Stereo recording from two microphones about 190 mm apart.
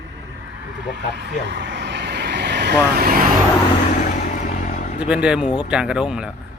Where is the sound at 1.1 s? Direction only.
65° right (ahead or behind).